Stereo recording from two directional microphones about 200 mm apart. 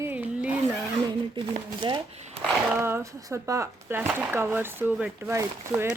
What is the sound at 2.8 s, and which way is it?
Speech, 15° right (ahead or behind).